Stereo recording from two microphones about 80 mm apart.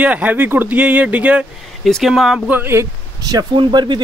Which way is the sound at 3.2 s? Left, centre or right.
Right.